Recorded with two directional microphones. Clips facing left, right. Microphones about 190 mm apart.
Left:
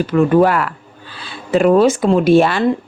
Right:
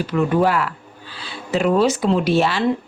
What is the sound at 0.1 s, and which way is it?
Speech, 55° left (ahead or behind).